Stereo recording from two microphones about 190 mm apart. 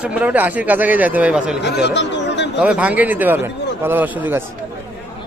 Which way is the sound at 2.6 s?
5° right (ahead or behind).